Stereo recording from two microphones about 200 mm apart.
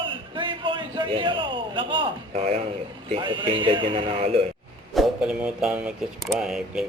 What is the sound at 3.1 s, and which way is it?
Speech, 25° right (ahead or behind).